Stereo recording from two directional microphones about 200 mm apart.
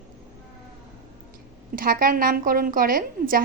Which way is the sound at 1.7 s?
45° right (ahead or behind).